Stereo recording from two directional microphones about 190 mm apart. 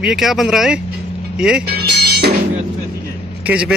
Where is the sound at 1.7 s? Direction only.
55° right (ahead or behind).